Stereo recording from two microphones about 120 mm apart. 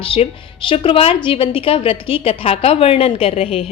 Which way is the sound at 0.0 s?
50° left (ahead or behind).